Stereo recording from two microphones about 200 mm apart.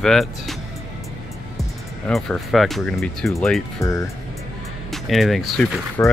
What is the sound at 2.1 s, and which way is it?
Speech, centre (ahead or behind).